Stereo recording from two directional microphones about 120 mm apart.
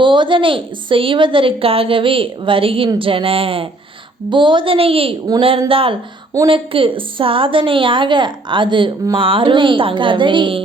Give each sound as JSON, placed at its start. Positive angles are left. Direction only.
{"t": 0.0, "sound": "a woman's voice", "side_deg": -40}